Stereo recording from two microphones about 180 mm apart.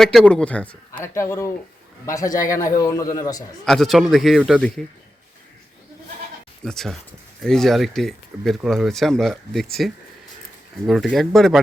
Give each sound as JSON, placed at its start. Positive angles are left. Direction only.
{"t": 0.0, "sound": "a man's voice", "side_deg": 0}
{"t": 3.7, "sound": "speech", "side_deg": 0}
{"t": 6.7, "sound": "speech", "side_deg": 0}
{"t": 10.8, "sound": "speech", "side_deg": 0}